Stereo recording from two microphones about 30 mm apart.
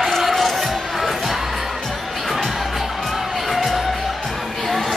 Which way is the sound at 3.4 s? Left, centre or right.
Centre.